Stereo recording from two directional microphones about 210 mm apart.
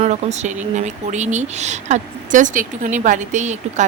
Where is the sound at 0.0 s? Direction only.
30° right (ahead or behind).